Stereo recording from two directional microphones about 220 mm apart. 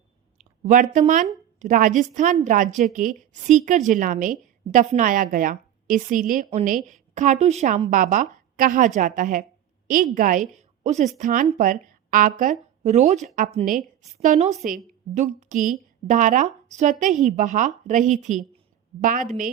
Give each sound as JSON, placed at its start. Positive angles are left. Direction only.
{"t": 0.3, "sound": "a woman's voice", "side_deg": -35}